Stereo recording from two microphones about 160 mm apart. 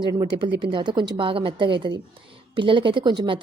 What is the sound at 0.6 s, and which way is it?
A woman's voice, 30° right (ahead or behind).